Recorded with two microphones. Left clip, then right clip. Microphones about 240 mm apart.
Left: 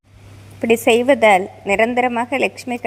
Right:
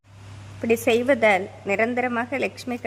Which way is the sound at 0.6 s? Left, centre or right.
Centre.